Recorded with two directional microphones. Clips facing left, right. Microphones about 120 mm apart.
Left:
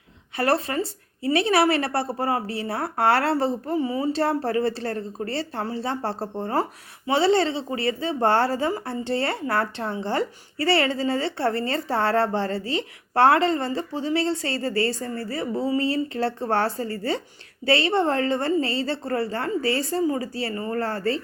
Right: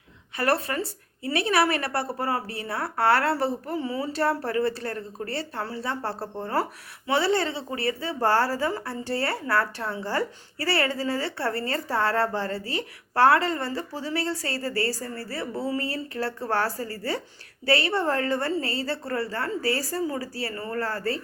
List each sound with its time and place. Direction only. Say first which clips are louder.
0.3 s a woman's voice: left 2 dB; 25° left (ahead or behind)